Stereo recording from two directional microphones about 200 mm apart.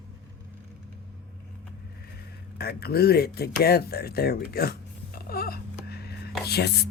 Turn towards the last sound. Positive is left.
turn(degrees=55)  # may be behind; listen again after turning